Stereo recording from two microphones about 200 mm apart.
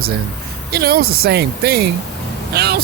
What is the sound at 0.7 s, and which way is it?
Speech, 50° right (ahead or behind).